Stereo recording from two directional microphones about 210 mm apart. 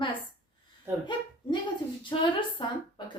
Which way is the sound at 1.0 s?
20° left (ahead or behind).